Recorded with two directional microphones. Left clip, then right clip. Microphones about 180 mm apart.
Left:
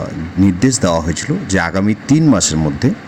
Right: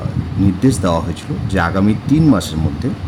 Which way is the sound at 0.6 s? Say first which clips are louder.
Right 1 dB; 20° left (ahead or behind).